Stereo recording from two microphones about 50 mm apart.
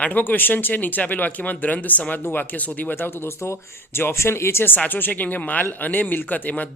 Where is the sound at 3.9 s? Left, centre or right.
Left.